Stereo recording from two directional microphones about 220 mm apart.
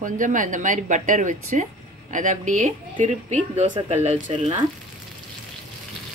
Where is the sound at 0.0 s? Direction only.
35° right (ahead or behind).